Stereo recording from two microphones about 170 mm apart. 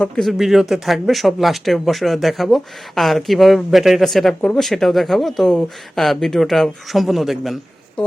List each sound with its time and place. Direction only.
0.0 s speech: centre (ahead or behind)